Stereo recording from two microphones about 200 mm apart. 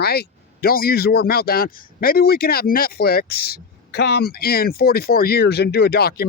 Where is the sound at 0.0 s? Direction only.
50° left (ahead or behind).